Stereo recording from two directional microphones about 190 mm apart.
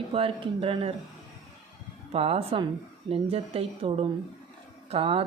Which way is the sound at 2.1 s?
30° right (ahead or behind).